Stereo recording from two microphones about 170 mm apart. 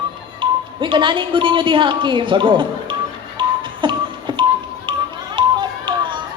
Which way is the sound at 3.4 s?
30° right (ahead or behind).